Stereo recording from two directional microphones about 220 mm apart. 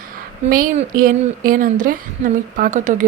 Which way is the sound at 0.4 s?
35° right (ahead or behind).